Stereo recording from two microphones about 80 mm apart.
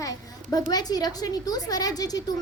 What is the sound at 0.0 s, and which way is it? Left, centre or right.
A child's voice, left.